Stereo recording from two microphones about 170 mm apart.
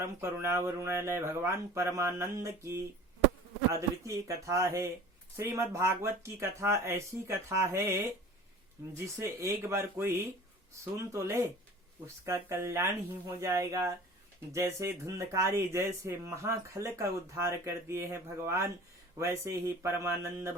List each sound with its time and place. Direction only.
0.2 s speech: 15° right (ahead or behind)